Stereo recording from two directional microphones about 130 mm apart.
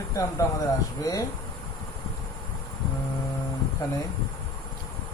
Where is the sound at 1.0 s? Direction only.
25° left (ahead or behind).